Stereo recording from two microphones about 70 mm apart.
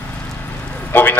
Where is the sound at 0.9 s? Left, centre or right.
Left.